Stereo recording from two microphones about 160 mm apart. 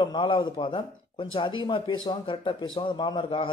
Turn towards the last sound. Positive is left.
turn(degrees=30)  # may be behind; listen again after turning